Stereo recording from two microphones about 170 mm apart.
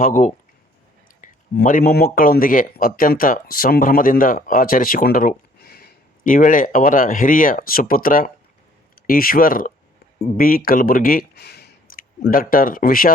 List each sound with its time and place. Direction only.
0.0 s speech: 50° left (ahead or behind)